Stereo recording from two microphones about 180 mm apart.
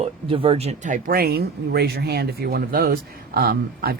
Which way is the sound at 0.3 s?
30° right (ahead or behind).